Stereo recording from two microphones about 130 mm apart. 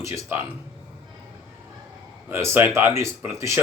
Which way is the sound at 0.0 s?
20° right (ahead or behind).